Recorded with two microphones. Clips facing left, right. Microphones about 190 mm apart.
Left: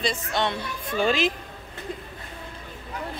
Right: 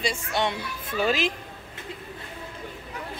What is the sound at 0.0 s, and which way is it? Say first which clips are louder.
A woman's voice: left 1 dB; 10° right (ahead or behind).